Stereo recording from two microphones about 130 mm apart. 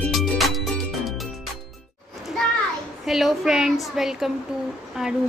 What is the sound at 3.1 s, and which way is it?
A woman's voice, 5° right (ahead or behind).